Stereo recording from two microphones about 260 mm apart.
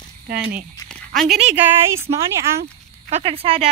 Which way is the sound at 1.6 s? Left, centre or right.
Centre.